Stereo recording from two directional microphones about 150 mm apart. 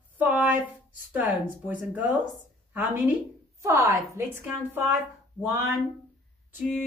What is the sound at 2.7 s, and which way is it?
Speech, 10° right (ahead or behind).